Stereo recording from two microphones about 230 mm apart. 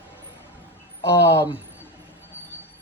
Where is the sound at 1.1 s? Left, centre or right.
Centre.